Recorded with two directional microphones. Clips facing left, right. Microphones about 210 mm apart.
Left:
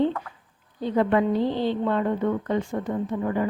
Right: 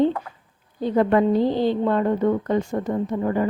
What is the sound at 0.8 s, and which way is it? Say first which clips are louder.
A woman's voice: right 3 dB; 45° right (ahead or behind).